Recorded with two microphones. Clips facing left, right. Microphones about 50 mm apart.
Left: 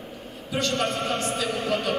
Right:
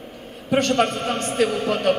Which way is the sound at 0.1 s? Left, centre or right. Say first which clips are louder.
Right 10 dB; right.